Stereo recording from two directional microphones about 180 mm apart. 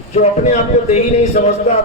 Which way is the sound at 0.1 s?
35° left (ahead or behind).